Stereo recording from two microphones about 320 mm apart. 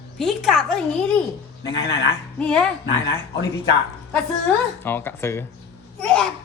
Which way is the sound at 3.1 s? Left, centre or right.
Left.